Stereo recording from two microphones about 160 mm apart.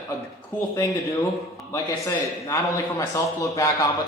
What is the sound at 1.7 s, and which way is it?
A man's voice, 20° left (ahead or behind).